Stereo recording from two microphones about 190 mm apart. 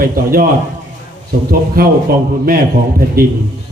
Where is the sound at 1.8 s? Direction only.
50° right (ahead or behind).